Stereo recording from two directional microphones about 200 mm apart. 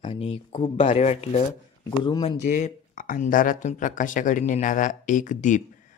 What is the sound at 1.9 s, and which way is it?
Speech, 20° left (ahead or behind).